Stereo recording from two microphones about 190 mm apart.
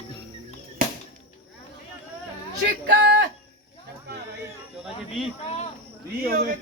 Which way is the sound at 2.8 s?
60° right (ahead or behind).